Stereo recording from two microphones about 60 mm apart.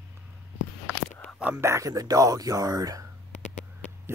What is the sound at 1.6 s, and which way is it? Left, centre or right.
Speech, right.